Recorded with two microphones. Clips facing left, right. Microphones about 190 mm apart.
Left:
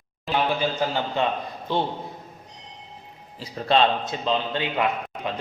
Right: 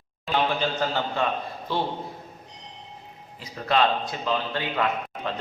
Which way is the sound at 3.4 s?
25° left (ahead or behind).